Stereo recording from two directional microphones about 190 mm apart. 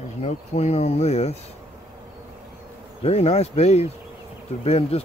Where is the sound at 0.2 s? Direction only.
35° left (ahead or behind).